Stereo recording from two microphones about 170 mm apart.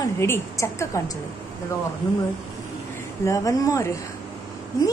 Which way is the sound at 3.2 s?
20° left (ahead or behind).